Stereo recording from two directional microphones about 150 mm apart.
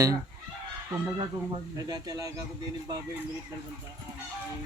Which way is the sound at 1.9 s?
25° right (ahead or behind).